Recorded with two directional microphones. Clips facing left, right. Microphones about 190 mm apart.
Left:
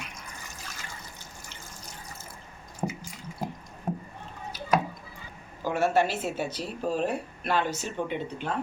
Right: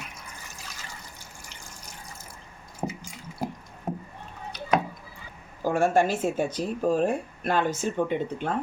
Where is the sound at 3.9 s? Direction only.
5° right (ahead or behind).